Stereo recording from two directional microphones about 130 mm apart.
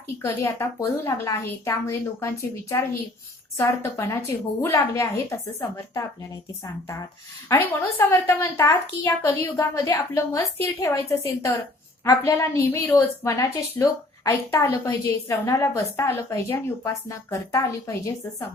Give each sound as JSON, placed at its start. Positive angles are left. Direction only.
{"t": 0.2, "sound": "a woman's voice", "side_deg": 20}
{"t": 7.4, "sound": "a woman's voice", "side_deg": 20}
{"t": 12.0, "sound": "a woman's voice", "side_deg": 20}